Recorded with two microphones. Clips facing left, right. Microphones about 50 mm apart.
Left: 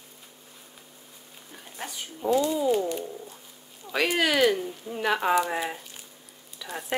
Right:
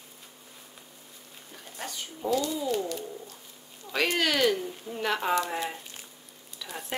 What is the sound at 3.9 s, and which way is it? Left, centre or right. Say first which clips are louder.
Speech: left 2 dB; centre.